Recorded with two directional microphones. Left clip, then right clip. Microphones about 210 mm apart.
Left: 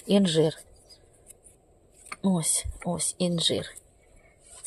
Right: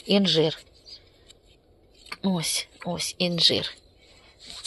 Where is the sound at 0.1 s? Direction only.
20° left (ahead or behind).